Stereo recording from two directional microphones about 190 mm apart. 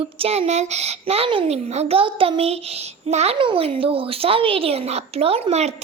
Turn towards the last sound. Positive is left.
turn(degrees=-35)  # may be behind; listen again after turning